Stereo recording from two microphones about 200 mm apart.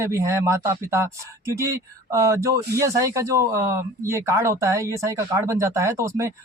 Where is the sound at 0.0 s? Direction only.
15° right (ahead or behind).